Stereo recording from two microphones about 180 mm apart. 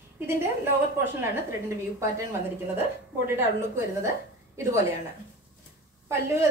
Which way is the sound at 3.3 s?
15° right (ahead or behind).